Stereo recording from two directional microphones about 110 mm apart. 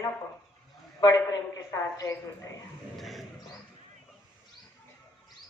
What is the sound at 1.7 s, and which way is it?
Speech, 30° left (ahead or behind).